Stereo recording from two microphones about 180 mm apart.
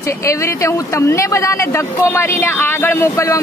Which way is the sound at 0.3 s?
15° left (ahead or behind).